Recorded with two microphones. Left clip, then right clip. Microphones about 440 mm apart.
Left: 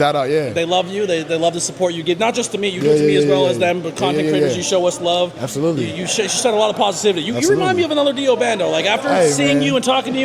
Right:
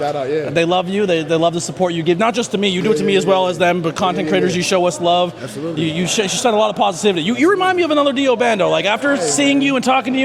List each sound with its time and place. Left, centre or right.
0.5 s a man's voice: right
2.6 s a man's voice: right
4.3 s a man's voice: right
9.4 s a man's voice: right